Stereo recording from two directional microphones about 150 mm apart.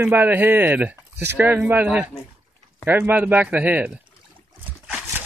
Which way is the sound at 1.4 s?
10° right (ahead or behind).